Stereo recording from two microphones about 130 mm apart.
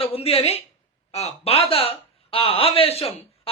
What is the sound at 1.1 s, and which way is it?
A man's voice, 55° left (ahead or behind).